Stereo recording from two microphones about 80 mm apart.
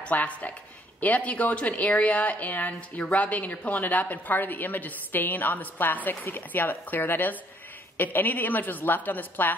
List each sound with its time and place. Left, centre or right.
0.0 s speech: centre